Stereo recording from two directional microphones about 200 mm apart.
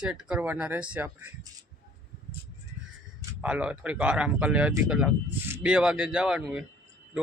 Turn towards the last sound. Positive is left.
turn(degrees=-5)  # may be behind; listen again after turning